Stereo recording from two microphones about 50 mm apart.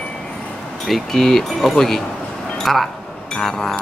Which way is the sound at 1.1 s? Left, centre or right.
Centre.